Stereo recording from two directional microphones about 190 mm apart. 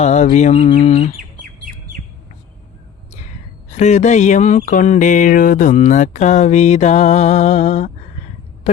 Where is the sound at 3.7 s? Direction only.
40° left (ahead or behind).